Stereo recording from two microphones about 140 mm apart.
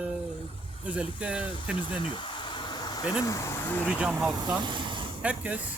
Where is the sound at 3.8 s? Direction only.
5° right (ahead or behind).